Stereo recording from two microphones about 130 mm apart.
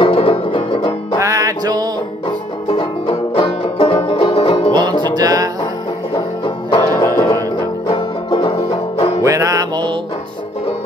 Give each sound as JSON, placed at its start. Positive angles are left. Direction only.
{"t": 0.0, "sound": "music", "side_deg": 45}
{"t": 1.2, "sound": "music", "side_deg": -25}
{"t": 2.2, "sound": "banjo", "side_deg": 40}
{"t": 5.1, "sound": "music", "side_deg": -30}
{"t": 6.8, "sound": "music", "side_deg": 20}
{"t": 8.3, "sound": "music", "side_deg": 45}
{"t": 9.2, "sound": "music", "side_deg": -25}